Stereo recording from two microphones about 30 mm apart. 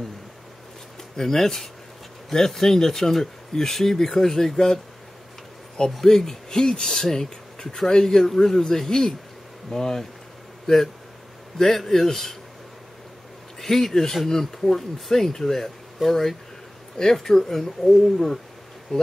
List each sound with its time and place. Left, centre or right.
1.1 s speech: centre
5.9 s speech: centre
11.5 s speech: centre
13.6 s speech: centre
18.9 s speech: left